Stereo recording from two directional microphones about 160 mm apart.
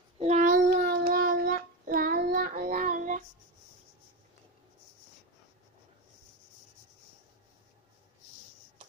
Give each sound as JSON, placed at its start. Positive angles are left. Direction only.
{"t": 0.2, "sound": "child singing", "side_deg": -45}
{"t": 0.7, "sound": "child singing", "side_deg": -75}